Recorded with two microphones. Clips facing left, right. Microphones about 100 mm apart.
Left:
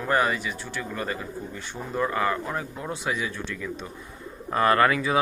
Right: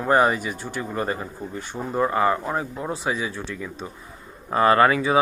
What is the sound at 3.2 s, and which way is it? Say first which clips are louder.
Speech: right 2 dB; 15° right (ahead or behind).